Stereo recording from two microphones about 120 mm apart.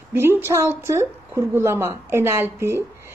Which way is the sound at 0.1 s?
20° right (ahead or behind).